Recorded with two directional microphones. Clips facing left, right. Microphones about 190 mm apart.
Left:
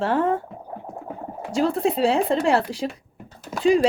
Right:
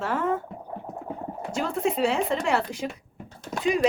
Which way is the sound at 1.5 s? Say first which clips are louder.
Left 5 dB; 35° left (ahead or behind).